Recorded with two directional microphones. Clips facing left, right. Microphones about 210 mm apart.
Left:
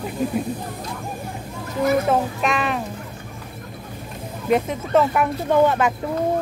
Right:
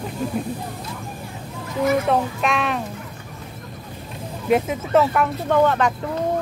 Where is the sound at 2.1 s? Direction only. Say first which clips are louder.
Even; centre (ahead or behind).